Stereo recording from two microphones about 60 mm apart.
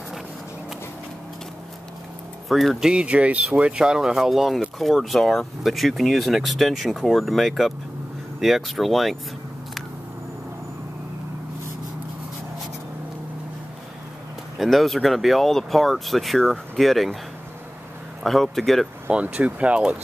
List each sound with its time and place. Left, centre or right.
2.4 s speech: centre
2.8 s speech: centre
14.6 s speech: centre
18.2 s speech: centre
19.0 s speech: right